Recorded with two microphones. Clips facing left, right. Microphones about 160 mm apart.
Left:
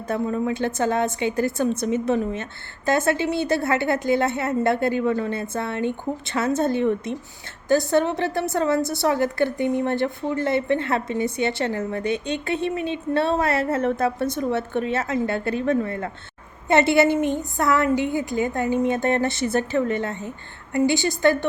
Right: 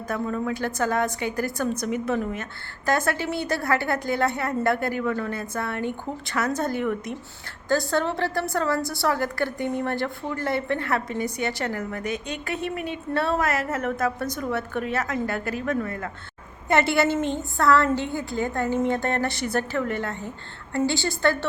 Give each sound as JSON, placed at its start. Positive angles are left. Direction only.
{"t": 0.1, "sound": "a woman's voice", "side_deg": 25}